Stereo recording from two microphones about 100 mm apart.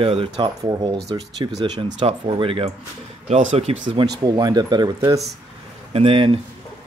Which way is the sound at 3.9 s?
45° right (ahead or behind).